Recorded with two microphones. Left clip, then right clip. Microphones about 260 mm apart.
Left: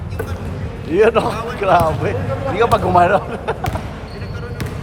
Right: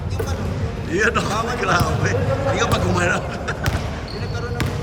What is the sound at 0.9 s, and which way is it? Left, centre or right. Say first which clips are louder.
A man's voice: left 6 dB; centre.